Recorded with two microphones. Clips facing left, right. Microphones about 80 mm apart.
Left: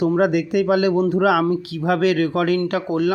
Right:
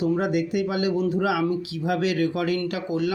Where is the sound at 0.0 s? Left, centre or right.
Left.